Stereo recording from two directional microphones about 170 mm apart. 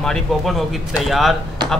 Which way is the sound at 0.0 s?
Centre (ahead or behind).